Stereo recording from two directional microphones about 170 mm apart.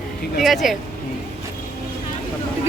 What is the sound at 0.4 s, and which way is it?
Speech, centre (ahead or behind).